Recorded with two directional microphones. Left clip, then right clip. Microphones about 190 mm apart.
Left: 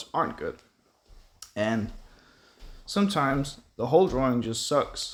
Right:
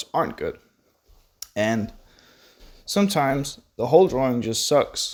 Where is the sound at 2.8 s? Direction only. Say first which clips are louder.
Right 5 dB; 35° right (ahead or behind).